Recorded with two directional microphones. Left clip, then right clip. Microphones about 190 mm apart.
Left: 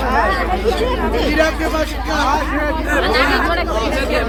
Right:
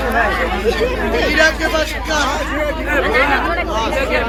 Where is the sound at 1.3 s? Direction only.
50° left (ahead or behind).